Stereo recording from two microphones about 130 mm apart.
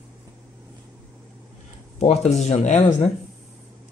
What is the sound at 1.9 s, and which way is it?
Speech, 55° left (ahead or behind).